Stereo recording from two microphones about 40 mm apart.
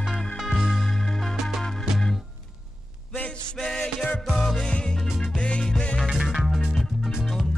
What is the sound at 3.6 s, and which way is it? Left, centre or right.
Music, centre.